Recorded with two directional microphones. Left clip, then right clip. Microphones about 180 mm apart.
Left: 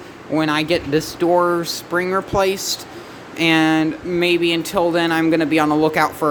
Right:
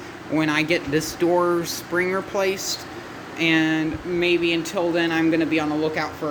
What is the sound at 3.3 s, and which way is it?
Speech, 35° left (ahead or behind).